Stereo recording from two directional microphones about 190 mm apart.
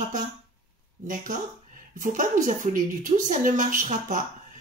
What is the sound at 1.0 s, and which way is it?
Speech, 45° right (ahead or behind).